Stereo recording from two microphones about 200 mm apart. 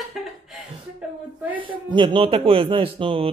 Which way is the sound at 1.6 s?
25° right (ahead or behind).